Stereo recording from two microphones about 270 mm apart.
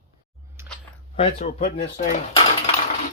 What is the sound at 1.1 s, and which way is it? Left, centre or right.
Speech, left.